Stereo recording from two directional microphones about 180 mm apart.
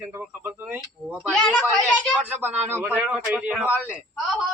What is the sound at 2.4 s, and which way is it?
Speech, 10° right (ahead or behind).